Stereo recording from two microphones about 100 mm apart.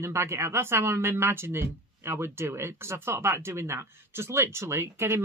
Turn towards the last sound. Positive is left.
turn(degrees=-25)  # may be behind; listen again after turning